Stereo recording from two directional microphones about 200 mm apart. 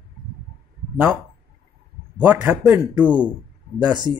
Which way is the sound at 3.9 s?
20° right (ahead or behind).